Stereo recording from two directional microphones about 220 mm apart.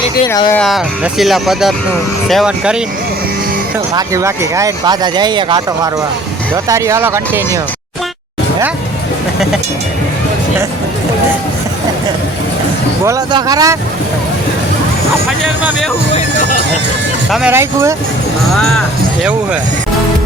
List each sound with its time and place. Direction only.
0.3 s speech: 20° left (ahead or behind)
0.5 s speech: centre (ahead or behind)
3.9 s speech: 15° right (ahead or behind)
13.1 s speech: 15° right (ahead or behind)
15.4 s speech: centre (ahead or behind)
17.3 s speech: 10° right (ahead or behind)
18.5 s speech: centre (ahead or behind)